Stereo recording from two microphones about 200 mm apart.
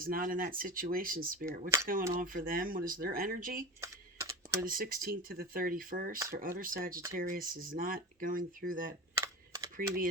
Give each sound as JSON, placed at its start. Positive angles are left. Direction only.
{"t": 0.0, "sound": "speech", "side_deg": -45}
{"t": 3.8, "sound": "typing", "side_deg": -15}
{"t": 4.6, "sound": "speech", "side_deg": -45}
{"t": 9.1, "sound": "computer keyboard", "side_deg": -15}
{"t": 9.7, "sound": "speech", "side_deg": -45}